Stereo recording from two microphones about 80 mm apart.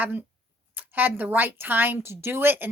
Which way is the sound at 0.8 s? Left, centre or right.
Right.